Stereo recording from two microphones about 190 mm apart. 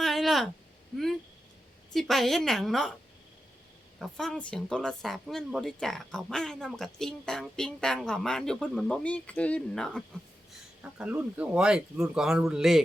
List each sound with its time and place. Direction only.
0.0 s a sound: centre (ahead or behind)
0.9 s speech: 5° left (ahead or behind)
4.0 s speech: 5° left (ahead or behind)